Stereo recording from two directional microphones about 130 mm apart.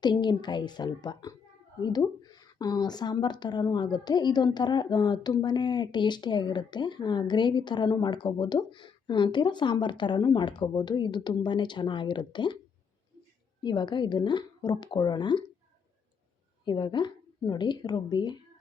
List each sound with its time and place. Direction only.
0.0 s a woman's voice: 35° left (ahead or behind)
13.6 s speech: 35° left (ahead or behind)
16.6 s speech: 35° left (ahead or behind)